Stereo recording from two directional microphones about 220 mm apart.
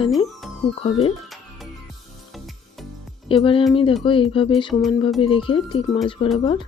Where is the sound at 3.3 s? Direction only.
25° left (ahead or behind).